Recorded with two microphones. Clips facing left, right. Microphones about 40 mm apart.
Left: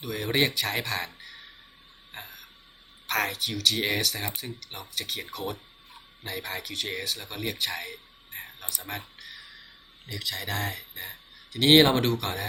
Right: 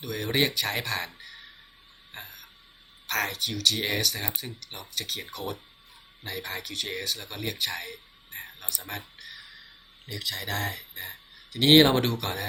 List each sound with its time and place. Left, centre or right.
0.0 s speech: centre
2.1 s a sound: centre
3.1 s speech: centre